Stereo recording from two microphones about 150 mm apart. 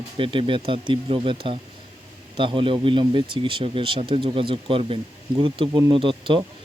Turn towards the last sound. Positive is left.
turn(degrees=-35)  # may be behind; listen again after turning